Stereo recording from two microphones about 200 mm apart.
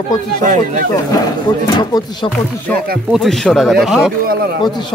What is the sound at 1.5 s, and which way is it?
Speech, 20° left (ahead or behind).